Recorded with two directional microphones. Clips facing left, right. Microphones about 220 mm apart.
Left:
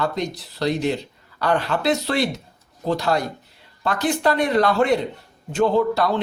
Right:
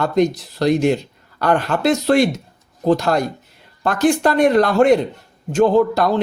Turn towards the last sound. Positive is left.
turn(degrees=-45)  # may be behind; listen again after turning